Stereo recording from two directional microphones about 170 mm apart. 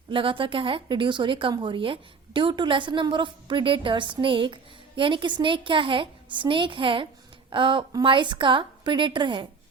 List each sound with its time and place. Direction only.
0.1 s a woman's voice: 30° right (ahead or behind)